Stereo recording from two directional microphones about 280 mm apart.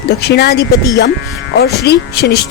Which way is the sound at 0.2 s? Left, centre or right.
Left.